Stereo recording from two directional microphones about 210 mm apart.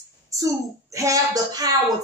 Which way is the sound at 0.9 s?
15° right (ahead or behind).